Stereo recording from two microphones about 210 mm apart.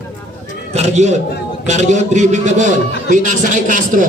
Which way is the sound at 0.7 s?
30° right (ahead or behind).